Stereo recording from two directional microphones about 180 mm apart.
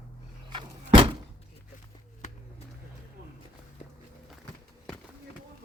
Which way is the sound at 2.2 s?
40° left (ahead or behind).